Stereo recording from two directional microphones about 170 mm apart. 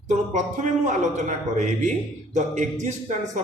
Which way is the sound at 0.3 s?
45° right (ahead or behind).